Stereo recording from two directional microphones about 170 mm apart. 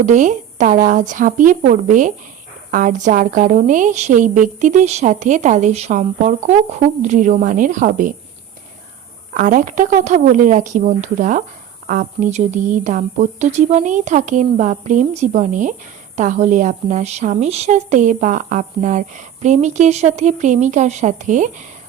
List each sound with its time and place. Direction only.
0.0 s a woman's voice: 45° right (ahead or behind)
9.3 s a woman's voice: 50° right (ahead or behind)